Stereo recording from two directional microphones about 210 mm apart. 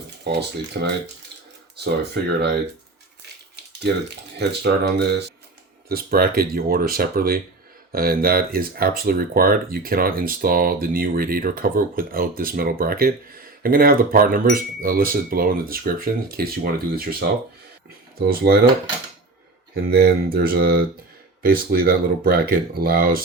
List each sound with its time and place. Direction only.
0.3 s speech: 55° right (ahead or behind)
4.4 s speech: 50° right (ahead or behind)
19.7 s speech: 50° right (ahead or behind)